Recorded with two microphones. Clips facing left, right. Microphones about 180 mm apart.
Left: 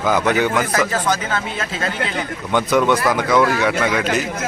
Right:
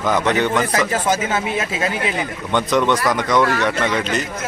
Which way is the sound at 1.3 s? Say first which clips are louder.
Right 3 dB; 10° right (ahead or behind).